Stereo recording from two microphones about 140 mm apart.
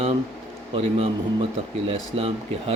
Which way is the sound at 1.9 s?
45° right (ahead or behind).